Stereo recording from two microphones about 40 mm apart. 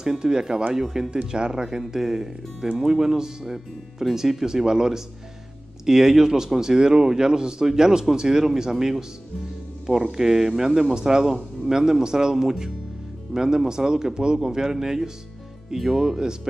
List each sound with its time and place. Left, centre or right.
0.0 s speech: centre
0.7 s speech: centre
1.1 s speech: right
10.1 s speech: centre